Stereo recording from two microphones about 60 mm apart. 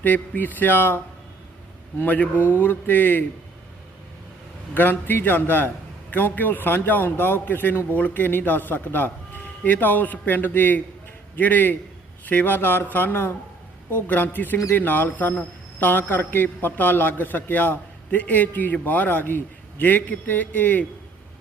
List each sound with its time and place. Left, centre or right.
0.0 s a man's voice: left
4.7 s a man's voice: left